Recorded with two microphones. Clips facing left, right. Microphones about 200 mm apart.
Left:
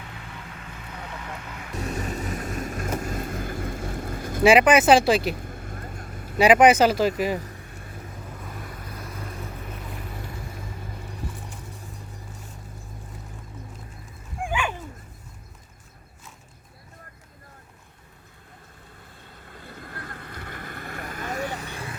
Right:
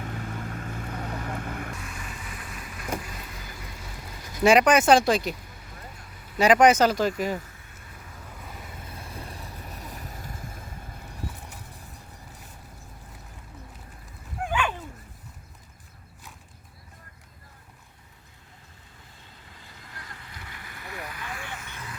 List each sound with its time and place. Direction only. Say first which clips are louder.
0.0 s vehicle: right 6 dB; 45° right (ahead or behind)
1.8 s vehicle: left 10 dB; 40° left (ahead or behind)
4.4 s speech: left 2 dB; 5° left (ahead or behind)
5.4 s vehicle: left 8 dB; 50° left (ahead or behind)
6.4 s speech: left 2 dB; 10° left (ahead or behind)
8.8 s boat: left 3 dB; 25° right (ahead or behind); by 10.6 s 40° right (ahead or behind)
14.4 s dog: even; 10° left (ahead or behind)
19.2 s vehicle: left 8 dB; 55° left (ahead or behind); by 21.9 s 30° left (ahead or behind)